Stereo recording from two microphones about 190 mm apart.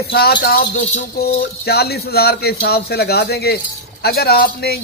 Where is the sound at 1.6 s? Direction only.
55° left (ahead or behind).